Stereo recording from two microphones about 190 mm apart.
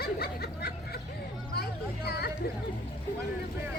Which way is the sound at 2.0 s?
55° left (ahead or behind).